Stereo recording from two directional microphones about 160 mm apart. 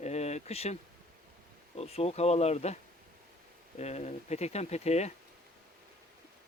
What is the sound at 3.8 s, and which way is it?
Speech, 45° left (ahead or behind).